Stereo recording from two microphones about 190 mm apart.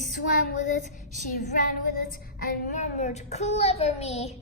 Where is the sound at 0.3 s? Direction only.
40° left (ahead or behind).